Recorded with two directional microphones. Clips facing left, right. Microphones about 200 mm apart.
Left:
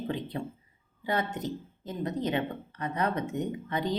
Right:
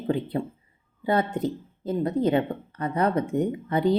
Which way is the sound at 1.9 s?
30° right (ahead or behind).